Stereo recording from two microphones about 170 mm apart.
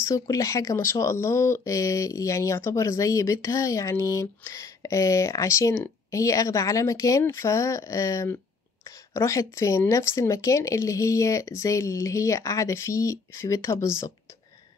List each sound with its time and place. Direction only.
0.0 s speech: 20° left (ahead or behind)